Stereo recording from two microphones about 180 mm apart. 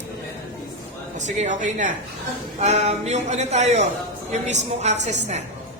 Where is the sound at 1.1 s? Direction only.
40° right (ahead or behind).